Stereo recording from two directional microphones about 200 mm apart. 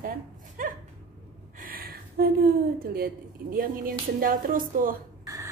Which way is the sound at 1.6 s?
45° right (ahead or behind).